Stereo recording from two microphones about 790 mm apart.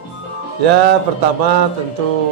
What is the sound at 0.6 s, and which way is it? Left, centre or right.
Speech, right.